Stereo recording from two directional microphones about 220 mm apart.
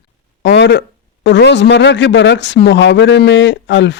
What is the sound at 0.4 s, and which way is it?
A man's voice, 50° left (ahead or behind).